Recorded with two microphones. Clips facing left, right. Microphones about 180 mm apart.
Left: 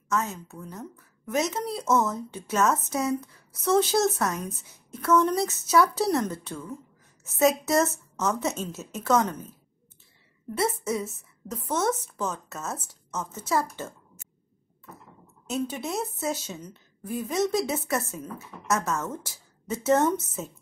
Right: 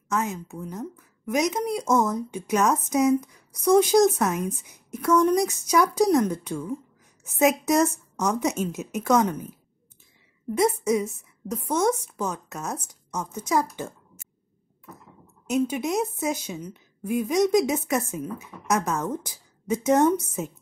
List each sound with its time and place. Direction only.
0.1 s a woman's voice: 15° right (ahead or behind)
10.5 s a woman's voice: 15° right (ahead or behind)
15.4 s a woman's voice: 15° right (ahead or behind)